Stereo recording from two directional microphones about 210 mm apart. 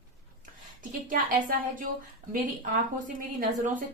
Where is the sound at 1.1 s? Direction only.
40° right (ahead or behind).